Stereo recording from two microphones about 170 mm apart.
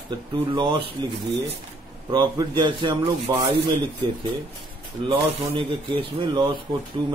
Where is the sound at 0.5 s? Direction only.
30° right (ahead or behind).